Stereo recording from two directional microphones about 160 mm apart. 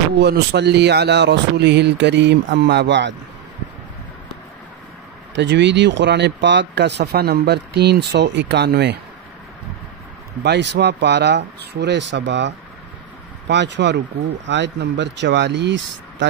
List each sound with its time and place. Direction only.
0.2 s speech: 90° right
5.3 s speech: 90° right
10.4 s speech: 90° right